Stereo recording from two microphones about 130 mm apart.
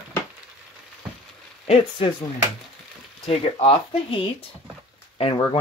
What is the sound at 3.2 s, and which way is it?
Speech, 45° left (ahead or behind).